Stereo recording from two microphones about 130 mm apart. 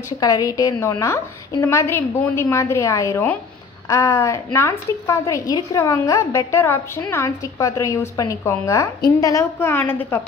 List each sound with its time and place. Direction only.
0.2 s a woman's voice: 30° left (ahead or behind)